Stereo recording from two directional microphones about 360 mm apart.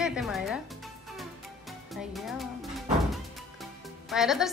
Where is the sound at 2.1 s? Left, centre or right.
Centre.